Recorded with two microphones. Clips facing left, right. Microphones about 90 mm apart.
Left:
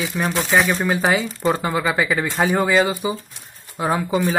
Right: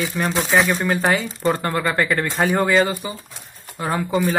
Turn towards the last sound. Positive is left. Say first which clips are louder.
# left 1 dB
turn(degrees=5)  # may be behind; listen again after turning